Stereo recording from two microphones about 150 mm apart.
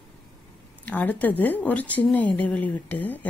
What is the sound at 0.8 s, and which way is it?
A woman's voice, 10° left (ahead or behind).